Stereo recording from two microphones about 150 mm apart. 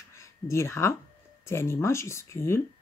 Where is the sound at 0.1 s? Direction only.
20° left (ahead or behind).